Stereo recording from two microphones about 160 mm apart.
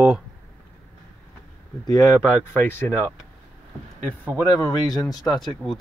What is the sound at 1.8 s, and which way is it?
Speech, 20° left (ahead or behind).